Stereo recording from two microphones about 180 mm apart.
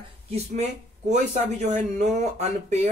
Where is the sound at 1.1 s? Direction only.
40° right (ahead or behind).